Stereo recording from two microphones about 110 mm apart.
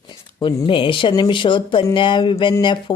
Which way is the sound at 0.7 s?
50° left (ahead or behind).